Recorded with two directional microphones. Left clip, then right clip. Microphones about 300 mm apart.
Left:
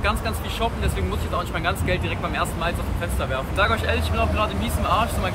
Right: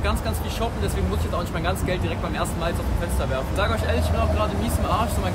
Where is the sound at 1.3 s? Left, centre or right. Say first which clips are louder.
Left 3 dB; centre.